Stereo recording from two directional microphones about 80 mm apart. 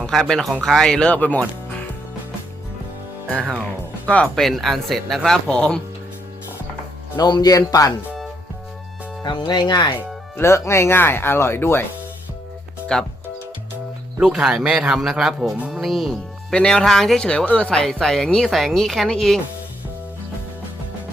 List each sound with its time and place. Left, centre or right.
0.0 s speech: centre
4.0 s speech: centre
4.4 s speech: centre
7.2 s speech: left
7.5 s speech: left
9.2 s speech: left
10.3 s speech: left
12.9 s speech: centre
14.2 s speech: centre